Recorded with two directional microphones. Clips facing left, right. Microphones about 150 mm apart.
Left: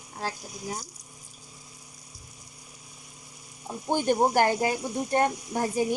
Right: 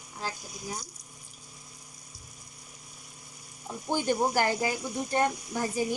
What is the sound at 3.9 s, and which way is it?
Speech, 55° left (ahead or behind).